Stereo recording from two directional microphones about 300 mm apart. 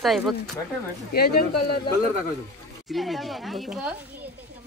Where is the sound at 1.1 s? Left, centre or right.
Left.